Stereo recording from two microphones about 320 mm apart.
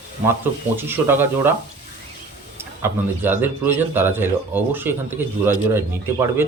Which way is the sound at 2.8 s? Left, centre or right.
Centre.